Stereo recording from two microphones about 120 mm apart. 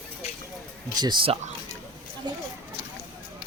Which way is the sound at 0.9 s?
35° right (ahead or behind).